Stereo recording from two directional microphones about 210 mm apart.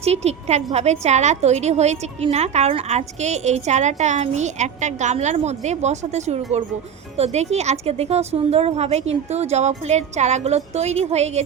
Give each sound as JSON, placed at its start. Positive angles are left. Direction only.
{"t": 0.0, "sound": "a woman's voice", "side_deg": -30}